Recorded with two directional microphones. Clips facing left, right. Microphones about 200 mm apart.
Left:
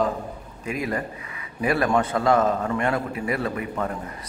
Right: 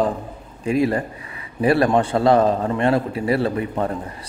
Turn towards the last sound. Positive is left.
turn(degrees=-30)  # may be behind; listen again after turning